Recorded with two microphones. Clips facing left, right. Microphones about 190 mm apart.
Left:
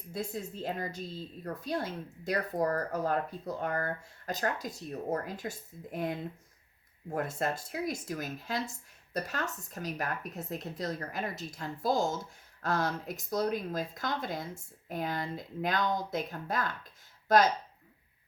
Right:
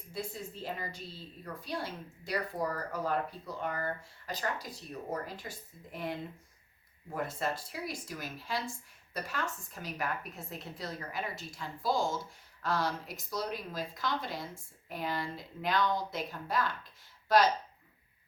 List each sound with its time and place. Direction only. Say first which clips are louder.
0.1 s a woman's voice: left 3 dB; 45° left (ahead or behind)